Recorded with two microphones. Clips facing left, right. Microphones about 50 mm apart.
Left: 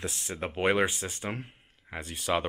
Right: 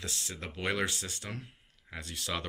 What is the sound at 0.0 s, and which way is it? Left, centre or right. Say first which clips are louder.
Speech: left 6 dB; left.